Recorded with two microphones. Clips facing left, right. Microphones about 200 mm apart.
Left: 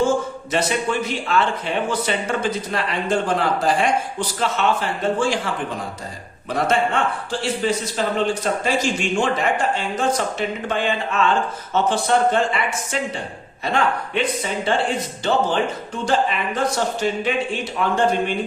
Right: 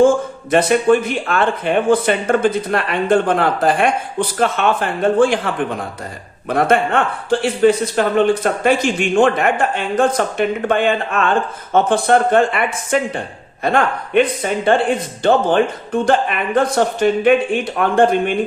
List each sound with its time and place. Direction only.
0.5 s speech: 55° right (ahead or behind)
6.5 s speech: 60° right (ahead or behind)